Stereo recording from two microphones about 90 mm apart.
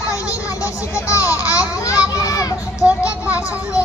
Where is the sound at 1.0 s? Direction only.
35° left (ahead or behind).